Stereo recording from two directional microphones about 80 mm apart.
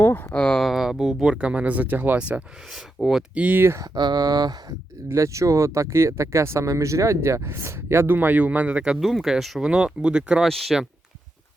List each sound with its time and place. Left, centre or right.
0.0 s a sound: left
0.3 s speech: centre
0.6 s speech: centre
2.7 s speech: centre
3.3 s speech: centre
3.8 s speech: right
5.0 s speech: right; by 9.0 s centre
9.0 s speech: centre
10.5 s speech: centre